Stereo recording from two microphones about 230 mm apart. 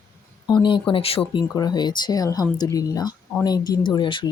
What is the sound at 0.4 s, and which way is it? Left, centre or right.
Speech, centre.